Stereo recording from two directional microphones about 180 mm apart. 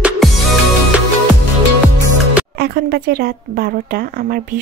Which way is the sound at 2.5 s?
60° right (ahead or behind).